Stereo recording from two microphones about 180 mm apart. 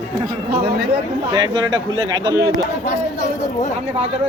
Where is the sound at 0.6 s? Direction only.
65° right (ahead or behind).